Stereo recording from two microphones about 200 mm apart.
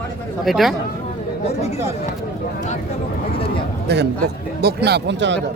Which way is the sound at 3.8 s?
55° right (ahead or behind).